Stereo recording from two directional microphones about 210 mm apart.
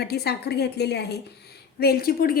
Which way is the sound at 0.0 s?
50° left (ahead or behind).